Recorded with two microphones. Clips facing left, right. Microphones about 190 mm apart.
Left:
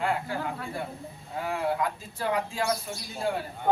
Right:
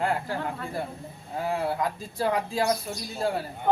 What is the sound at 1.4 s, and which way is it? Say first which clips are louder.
Speech: right 1 dB; 35° right (ahead or behind).